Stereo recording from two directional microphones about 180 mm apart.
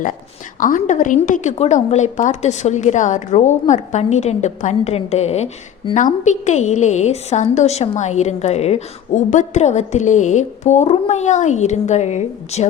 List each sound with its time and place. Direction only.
0.6 s a woman's voice: 45° left (ahead or behind)